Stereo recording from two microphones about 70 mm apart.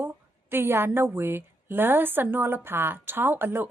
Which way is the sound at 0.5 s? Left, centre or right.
Right.